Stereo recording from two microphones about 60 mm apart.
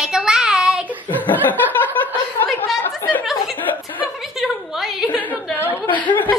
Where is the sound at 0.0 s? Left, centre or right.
Centre.